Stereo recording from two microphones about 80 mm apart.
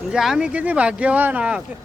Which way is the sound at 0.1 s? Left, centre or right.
Centre.